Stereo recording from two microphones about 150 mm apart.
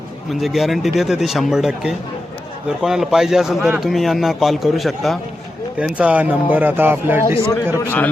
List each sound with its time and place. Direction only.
0.3 s a man's voice: centre (ahead or behind); by 7.5 s 15° right (ahead or behind)